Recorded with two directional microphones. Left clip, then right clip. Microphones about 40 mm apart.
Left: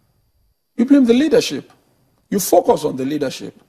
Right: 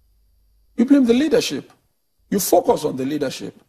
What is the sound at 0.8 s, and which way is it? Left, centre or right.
Speech, left.